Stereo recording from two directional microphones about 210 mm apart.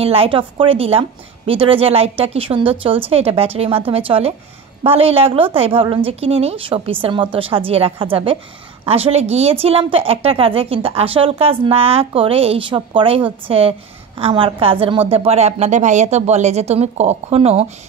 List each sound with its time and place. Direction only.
0.0 s speech: 25° right (ahead or behind)